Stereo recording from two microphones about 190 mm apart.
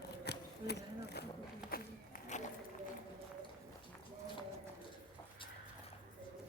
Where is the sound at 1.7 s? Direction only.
45° left (ahead or behind).